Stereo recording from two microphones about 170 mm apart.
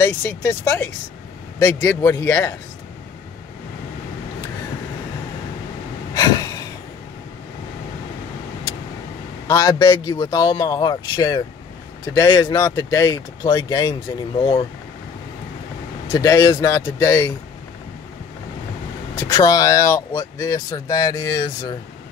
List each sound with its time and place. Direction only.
0.0 s a man's voice: 20° left (ahead or behind)
6.1 s a sound: 20° left (ahead or behind)
9.5 s speech: 20° left (ahead or behind)
16.1 s speech: 20° left (ahead or behind)
19.1 s speech: 25° left (ahead or behind)